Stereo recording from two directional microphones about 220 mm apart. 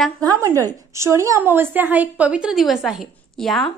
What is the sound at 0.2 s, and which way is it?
A woman's voice, 15° right (ahead or behind).